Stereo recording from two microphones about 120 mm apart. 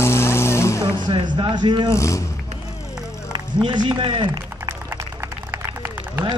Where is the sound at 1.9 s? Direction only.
25° left (ahead or behind).